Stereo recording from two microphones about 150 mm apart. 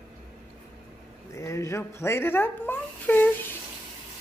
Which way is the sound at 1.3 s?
20° left (ahead or behind).